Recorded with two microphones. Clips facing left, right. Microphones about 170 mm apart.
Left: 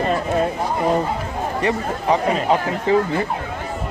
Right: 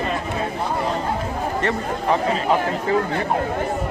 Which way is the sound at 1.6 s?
15° left (ahead or behind).